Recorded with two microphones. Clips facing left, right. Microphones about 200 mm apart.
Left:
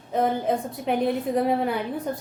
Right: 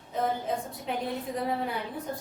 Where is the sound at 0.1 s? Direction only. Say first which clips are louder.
Left 6 dB; 65° left (ahead or behind).